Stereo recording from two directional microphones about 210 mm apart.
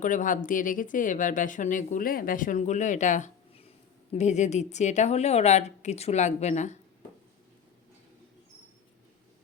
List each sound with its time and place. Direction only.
0.0 s speech: 40° left (ahead or behind)